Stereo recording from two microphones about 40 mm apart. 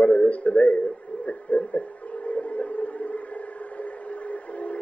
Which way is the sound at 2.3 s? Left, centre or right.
Left.